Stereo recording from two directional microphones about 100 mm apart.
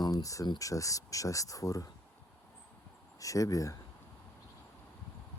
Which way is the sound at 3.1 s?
35° left (ahead or behind).